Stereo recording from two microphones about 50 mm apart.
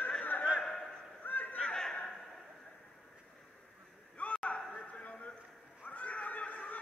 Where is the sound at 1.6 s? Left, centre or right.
Centre.